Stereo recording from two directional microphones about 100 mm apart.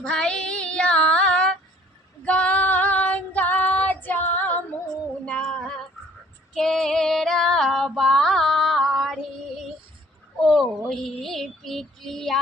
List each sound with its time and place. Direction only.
0.0 s child singing: 10° left (ahead or behind)
2.2 s female singing: 10° left (ahead or behind)
10.4 s a sound: centre (ahead or behind)
10.8 s child singing: 5° left (ahead or behind)